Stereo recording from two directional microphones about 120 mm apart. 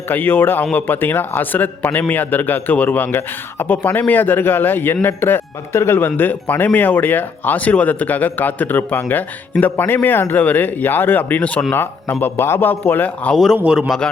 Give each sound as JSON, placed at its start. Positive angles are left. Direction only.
{"t": 0.1, "sound": "speech", "side_deg": 15}
{"t": 13.3, "sound": "a man's voice", "side_deg": 0}